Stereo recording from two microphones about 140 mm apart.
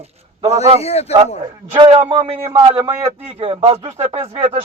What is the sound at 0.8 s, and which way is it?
Speech, 45° left (ahead or behind).